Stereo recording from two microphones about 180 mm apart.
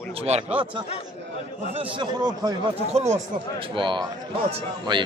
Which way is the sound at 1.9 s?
25° right (ahead or behind).